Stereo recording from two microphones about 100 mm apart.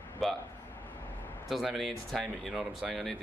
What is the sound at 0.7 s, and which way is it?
Vehicle, 20° left (ahead or behind).